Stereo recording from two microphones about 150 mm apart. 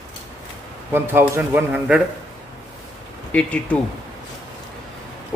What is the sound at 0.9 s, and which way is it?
Speech, 15° right (ahead or behind).